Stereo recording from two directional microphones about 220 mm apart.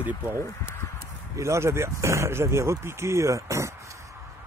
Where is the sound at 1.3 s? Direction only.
15° right (ahead or behind).